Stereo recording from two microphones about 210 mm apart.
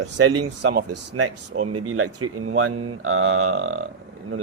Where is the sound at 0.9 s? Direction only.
90° right.